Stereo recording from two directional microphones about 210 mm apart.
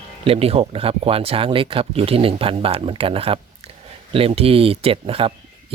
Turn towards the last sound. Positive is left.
turn(degrees=-25)  # may be behind; listen again after turning